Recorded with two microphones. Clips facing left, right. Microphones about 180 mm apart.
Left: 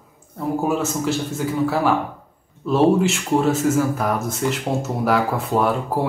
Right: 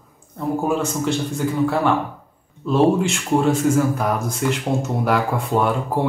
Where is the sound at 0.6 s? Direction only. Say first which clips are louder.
Even; 5° left (ahead or behind).